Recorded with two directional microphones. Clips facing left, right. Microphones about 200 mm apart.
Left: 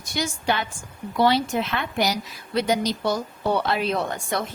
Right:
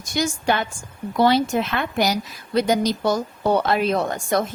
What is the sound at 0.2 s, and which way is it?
A woman's voice, 50° right (ahead or behind).